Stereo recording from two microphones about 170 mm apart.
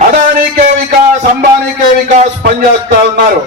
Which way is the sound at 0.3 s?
50° right (ahead or behind).